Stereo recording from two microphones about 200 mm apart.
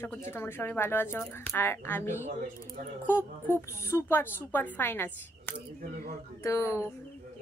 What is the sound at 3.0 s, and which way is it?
A woman's voice, 10° left (ahead or behind).